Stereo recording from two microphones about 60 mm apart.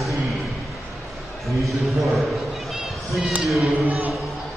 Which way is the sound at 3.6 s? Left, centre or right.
Right.